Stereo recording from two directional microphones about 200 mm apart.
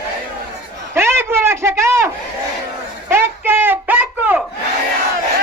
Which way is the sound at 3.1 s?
10° right (ahead or behind).